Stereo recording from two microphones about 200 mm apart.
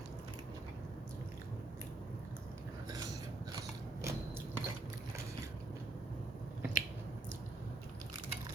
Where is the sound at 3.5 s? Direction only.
20° right (ahead or behind).